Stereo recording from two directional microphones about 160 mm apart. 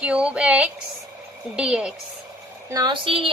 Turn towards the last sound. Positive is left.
turn(degrees=-35)  # may be behind; listen again after turning